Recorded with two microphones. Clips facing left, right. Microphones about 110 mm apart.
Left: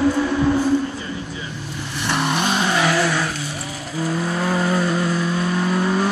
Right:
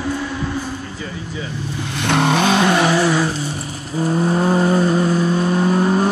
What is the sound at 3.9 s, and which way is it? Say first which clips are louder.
Vehicle: right 5 dB; 35° right (ahead or behind).